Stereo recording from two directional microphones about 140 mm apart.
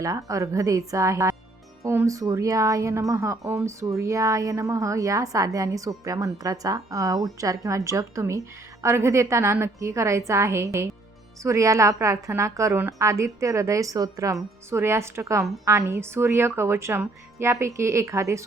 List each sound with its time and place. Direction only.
0.0 s speech: 25° right (ahead or behind)